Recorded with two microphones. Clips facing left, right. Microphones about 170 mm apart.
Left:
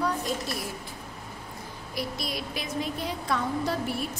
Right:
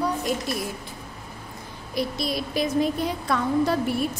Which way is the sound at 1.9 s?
25° right (ahead or behind).